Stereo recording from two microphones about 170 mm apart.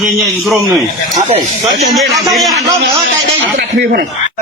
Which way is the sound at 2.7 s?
15° right (ahead or behind).